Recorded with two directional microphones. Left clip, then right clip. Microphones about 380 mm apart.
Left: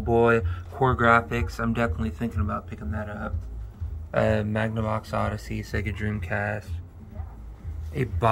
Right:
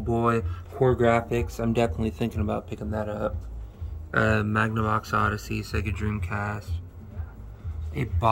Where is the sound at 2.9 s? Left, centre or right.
Right.